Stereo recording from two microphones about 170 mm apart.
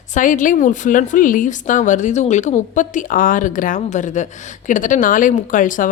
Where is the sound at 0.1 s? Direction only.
50° left (ahead or behind).